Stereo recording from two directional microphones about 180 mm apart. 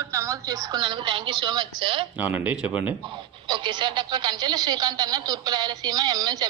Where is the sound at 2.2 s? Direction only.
10° right (ahead or behind).